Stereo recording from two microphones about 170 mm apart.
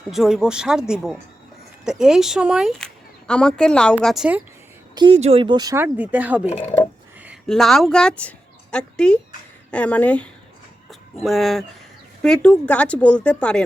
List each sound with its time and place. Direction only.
0.1 s speech: centre (ahead or behind)
4.9 s speech: 35° right (ahead or behind); by 6.5 s 10° right (ahead or behind)
6.5 s speech: 35° left (ahead or behind)
7.4 s a woman's voice: centre (ahead or behind)